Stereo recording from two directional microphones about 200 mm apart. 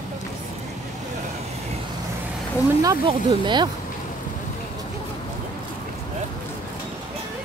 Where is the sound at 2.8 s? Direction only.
20° right (ahead or behind).